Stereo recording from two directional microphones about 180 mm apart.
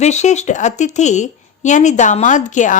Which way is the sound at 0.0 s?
40° left (ahead or behind).